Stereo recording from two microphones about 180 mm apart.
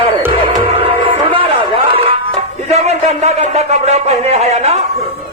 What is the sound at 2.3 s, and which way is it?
Speech, 35° right (ahead or behind).